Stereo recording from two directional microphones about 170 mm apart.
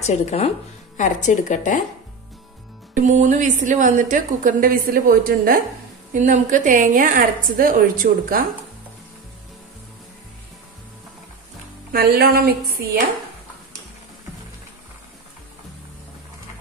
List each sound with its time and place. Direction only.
0.0 s a woman's voice: 40° left (ahead or behind)
2.9 s a woman's voice: 45° right (ahead or behind)
11.9 s a woman's voice: 65° right (ahead or behind)